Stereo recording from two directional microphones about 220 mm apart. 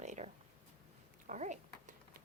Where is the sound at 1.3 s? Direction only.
35° right (ahead or behind).